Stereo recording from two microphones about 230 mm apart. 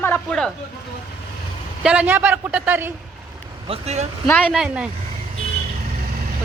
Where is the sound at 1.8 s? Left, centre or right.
Centre.